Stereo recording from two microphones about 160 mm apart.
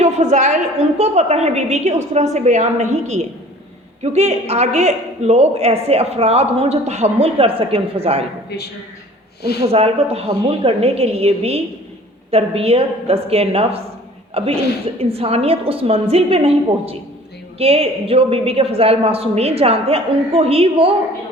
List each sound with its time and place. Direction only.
0.0 s a woman's voice: 45° right (ahead or behind)
8.4 s a man's voice: 90° left
9.7 s a woman's voice: 40° right (ahead or behind)